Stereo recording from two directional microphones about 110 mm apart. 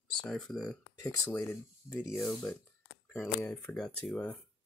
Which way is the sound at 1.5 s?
20° left (ahead or behind).